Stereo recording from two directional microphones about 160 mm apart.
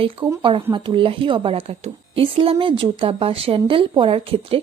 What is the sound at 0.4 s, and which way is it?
A woman's voice, 30° right (ahead or behind).